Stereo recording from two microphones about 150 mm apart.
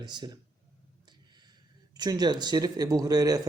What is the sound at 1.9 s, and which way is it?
Speech, 25° right (ahead or behind).